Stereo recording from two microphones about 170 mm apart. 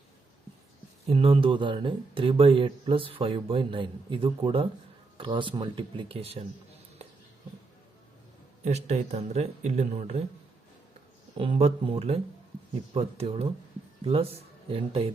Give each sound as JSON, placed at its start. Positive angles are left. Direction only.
{"t": 1.0, "sound": "speech", "side_deg": -35}
{"t": 8.6, "sound": "speech", "side_deg": -40}
{"t": 11.3, "sound": "speech", "side_deg": -35}